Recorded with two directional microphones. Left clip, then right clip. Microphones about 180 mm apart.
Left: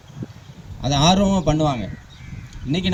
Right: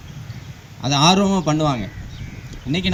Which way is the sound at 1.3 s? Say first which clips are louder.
Even; 35° left (ahead or behind).